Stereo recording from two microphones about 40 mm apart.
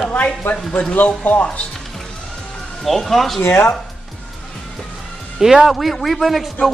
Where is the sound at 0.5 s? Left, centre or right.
Left.